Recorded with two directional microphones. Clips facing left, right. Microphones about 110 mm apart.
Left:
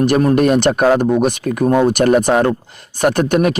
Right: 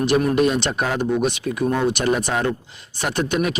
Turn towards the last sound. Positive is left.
turn(degrees=50)  # may be behind; listen again after turning